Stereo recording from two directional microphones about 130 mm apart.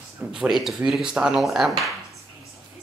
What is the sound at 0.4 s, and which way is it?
Speech, centre (ahead or behind).